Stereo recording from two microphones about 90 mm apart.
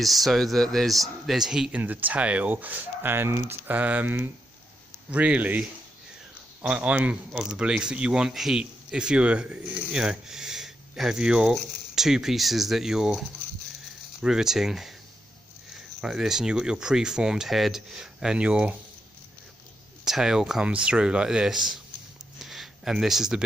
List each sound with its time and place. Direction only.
0.0 s speech: centre (ahead or behind)
1.8 s speech: 20° right (ahead or behind)
3.7 s a man's voice: 15° right (ahead or behind)
16.0 s a man's voice: 5° right (ahead or behind)
20.1 s a man's voice: 5° right (ahead or behind)
22.4 s a sound: 5° right (ahead or behind)